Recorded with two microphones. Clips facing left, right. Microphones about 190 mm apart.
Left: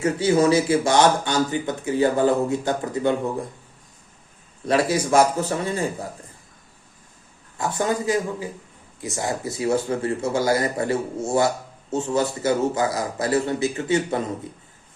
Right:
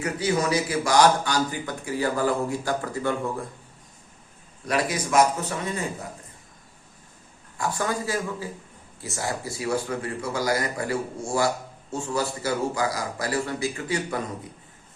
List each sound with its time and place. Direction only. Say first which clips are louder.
0.0 s speech: left 6 dB; 25° left (ahead or behind)
4.6 s speech: left 6 dB; 25° left (ahead or behind)
7.6 s speech: left 4 dB; 20° left (ahead or behind)